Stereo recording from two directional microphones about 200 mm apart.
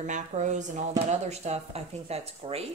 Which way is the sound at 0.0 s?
40° right (ahead or behind).